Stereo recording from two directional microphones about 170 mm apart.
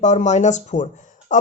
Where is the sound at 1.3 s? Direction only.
45° left (ahead or behind).